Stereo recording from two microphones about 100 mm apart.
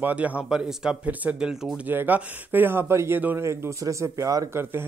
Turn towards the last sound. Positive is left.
turn(degrees=-30)  # may be behind; listen again after turning